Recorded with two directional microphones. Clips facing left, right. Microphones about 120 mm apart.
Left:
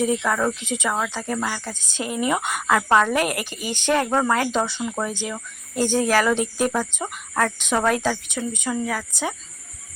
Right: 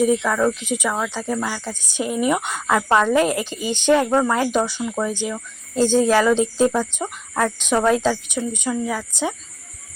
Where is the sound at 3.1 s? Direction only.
20° right (ahead or behind).